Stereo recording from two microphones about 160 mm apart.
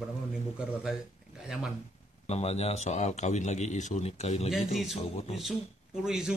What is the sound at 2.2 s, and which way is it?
A man's voice, 40° left (ahead or behind).